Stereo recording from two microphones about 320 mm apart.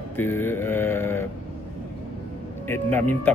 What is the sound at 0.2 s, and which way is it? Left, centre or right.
Mantra, centre.